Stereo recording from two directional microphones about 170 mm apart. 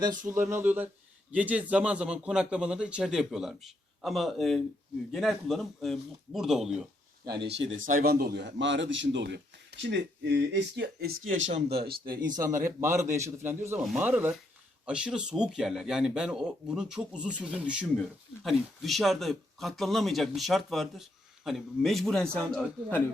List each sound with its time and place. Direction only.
0.3 s speech: 15° right (ahead or behind)
7.6 s speech: 40° right (ahead or behind)
7.9 s speech: 65° right (ahead or behind); by 11.1 s 85° right
11.9 s speech: 60° right (ahead or behind)
12.3 s speech: 20° right (ahead or behind); by 23.0 s 10° left (ahead or behind)